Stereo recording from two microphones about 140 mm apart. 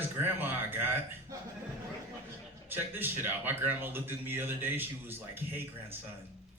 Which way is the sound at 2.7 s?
15° right (ahead or behind).